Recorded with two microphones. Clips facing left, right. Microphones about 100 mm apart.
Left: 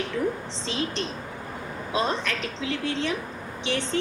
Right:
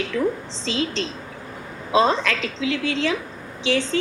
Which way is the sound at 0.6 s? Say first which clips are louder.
Right 5 dB; 90° right.